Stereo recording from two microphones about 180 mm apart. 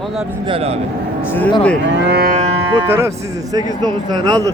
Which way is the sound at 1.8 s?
75° right (ahead or behind).